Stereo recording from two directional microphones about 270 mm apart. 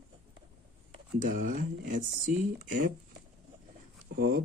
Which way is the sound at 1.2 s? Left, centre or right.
Right.